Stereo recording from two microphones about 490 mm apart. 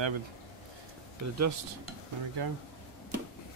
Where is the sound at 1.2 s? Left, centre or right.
Right.